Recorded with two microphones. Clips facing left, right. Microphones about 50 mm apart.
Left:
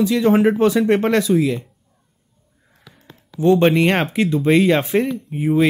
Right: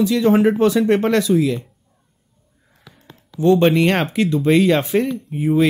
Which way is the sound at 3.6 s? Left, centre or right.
Centre.